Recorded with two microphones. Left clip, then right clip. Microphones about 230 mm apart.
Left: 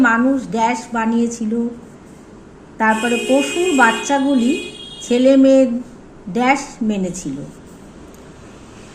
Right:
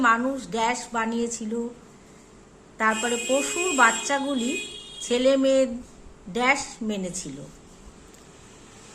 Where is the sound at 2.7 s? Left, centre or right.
Centre.